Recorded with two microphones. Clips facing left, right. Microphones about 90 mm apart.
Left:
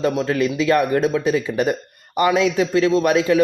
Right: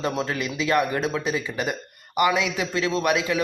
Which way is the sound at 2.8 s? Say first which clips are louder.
Left 6 dB; 25° left (ahead or behind).